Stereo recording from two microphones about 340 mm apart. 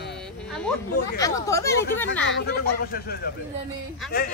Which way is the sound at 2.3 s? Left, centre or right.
Left.